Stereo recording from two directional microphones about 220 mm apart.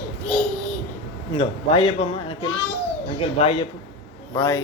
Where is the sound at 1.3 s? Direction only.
25° left (ahead or behind).